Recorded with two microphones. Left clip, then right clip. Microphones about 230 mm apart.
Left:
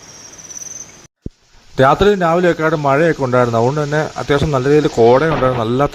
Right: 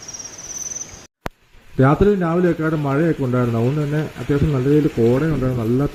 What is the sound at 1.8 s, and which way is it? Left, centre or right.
Speech, left.